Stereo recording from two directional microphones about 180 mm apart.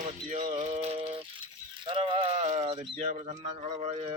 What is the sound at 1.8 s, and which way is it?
Sheep, 30° right (ahead or behind).